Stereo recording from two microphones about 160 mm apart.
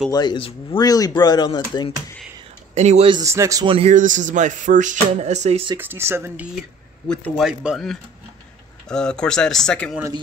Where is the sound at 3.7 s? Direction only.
35° right (ahead or behind).